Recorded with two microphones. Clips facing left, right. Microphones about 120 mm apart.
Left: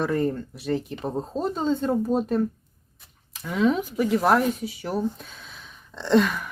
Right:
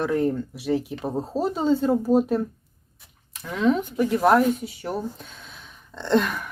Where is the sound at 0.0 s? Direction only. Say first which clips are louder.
Right 1 dB; centre (ahead or behind).